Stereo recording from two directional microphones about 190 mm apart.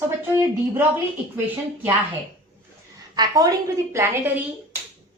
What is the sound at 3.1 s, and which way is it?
A woman's voice, 20° right (ahead or behind).